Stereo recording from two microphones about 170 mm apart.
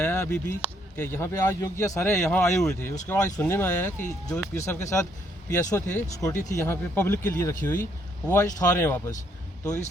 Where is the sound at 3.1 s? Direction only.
15° left (ahead or behind).